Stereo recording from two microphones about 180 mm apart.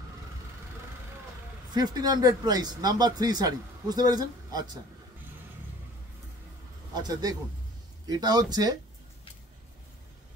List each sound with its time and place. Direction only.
1.7 s speech: 20° right (ahead or behind)
6.9 s speech: 20° right (ahead or behind)